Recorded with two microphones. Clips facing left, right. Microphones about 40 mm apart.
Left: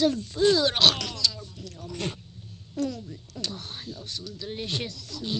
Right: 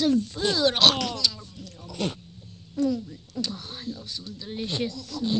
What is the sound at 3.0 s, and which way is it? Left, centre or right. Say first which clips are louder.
Speech: right 4 dB; centre.